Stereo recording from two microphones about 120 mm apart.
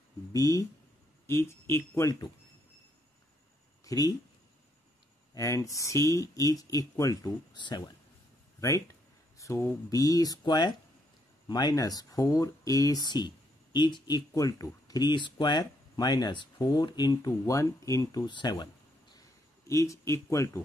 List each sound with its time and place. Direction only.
0.3 s speech: 30° left (ahead or behind)
3.8 s speech: 30° left (ahead or behind)
5.3 s speech: 25° left (ahead or behind)
8.5 s speech: 25° left (ahead or behind)
18.2 s a sound: 40° left (ahead or behind)
19.7 s speech: 25° left (ahead or behind)